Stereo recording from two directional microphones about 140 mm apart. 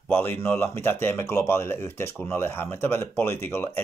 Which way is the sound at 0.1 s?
15° left (ahead or behind).